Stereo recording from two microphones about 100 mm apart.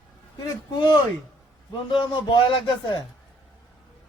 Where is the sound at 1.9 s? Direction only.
50° left (ahead or behind).